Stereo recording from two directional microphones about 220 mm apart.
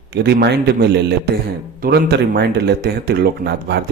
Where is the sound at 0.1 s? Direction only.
50° right (ahead or behind).